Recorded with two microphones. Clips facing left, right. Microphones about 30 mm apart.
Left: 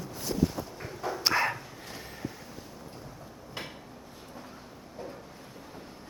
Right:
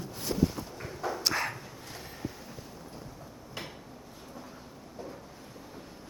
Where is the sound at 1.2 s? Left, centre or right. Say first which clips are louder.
Left 5 dB; centre.